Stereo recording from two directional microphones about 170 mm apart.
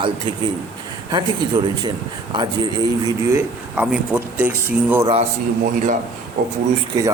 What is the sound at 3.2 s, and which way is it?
Speech, 10° right (ahead or behind).